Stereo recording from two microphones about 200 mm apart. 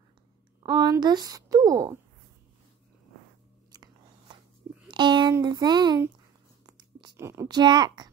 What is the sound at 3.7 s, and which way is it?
Biting, 20° right (ahead or behind).